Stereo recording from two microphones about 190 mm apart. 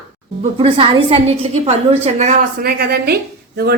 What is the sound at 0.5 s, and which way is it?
A woman's voice, 30° right (ahead or behind).